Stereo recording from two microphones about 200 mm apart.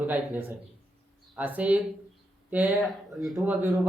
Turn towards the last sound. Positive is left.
turn(degrees=-10)  # may be behind; listen again after turning